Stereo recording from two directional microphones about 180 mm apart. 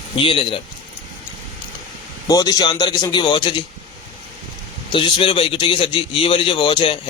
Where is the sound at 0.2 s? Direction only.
30° left (ahead or behind).